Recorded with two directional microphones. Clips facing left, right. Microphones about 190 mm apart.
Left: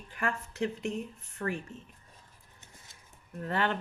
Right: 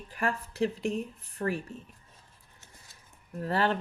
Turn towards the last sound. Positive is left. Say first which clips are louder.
# right 3 dB
turn(degrees=-35)  # may be behind; listen again after turning